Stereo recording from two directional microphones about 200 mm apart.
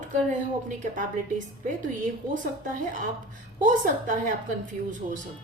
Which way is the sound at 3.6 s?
40° right (ahead or behind).